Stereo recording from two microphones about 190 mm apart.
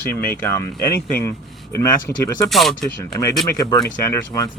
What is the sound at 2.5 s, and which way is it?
Speech, centre (ahead or behind).